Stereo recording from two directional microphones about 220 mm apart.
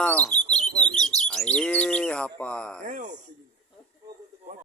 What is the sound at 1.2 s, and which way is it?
Speech, 5° left (ahead or behind).